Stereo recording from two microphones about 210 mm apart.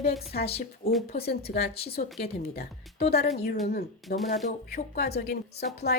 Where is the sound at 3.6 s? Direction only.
45° left (ahead or behind).